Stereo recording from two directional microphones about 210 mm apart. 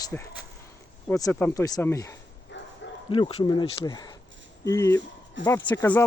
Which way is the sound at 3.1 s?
25° left (ahead or behind).